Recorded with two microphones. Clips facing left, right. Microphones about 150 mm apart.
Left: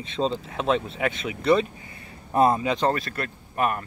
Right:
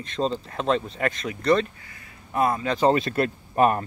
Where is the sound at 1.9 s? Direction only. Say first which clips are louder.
Left 4 dB; 30° left (ahead or behind).